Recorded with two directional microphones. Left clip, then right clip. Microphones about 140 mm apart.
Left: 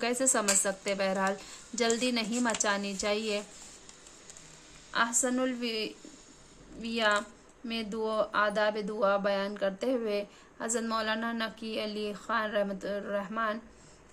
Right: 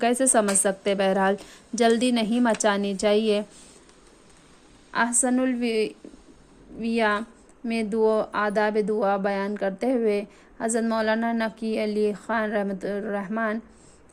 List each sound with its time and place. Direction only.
0.0 s a woman's voice: 45° right (ahead or behind)
4.9 s speech: 40° right (ahead or behind)